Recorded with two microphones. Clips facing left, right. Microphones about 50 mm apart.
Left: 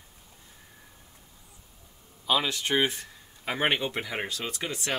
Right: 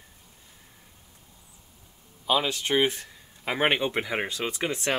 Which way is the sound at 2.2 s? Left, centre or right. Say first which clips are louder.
Right 2 dB; centre.